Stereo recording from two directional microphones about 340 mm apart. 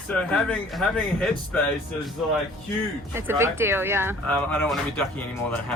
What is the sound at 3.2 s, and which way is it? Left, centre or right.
Speech, centre.